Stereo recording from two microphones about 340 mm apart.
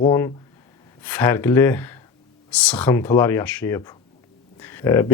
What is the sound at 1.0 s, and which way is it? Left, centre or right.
Speech, centre.